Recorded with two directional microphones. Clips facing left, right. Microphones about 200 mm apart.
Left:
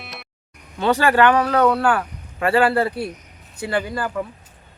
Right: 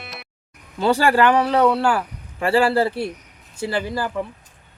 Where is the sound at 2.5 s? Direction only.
30° right (ahead or behind).